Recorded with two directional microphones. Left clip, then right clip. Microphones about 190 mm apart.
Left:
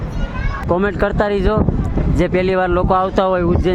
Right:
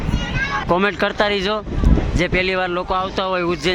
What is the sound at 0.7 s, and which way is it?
Speech, 20° left (ahead or behind).